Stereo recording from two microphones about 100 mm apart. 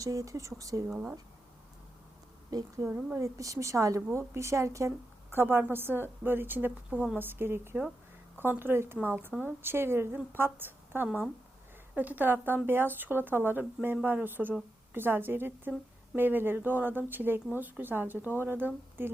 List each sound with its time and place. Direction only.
0.0 s a woman's voice: 35° right (ahead or behind)
2.5 s a woman's voice: 40° right (ahead or behind)
2.9 s a woman's voice: 25° right (ahead or behind)